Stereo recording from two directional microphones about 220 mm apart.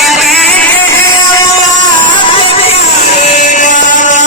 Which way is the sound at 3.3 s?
35° left (ahead or behind).